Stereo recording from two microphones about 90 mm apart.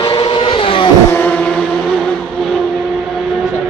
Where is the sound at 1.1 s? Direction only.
15° left (ahead or behind).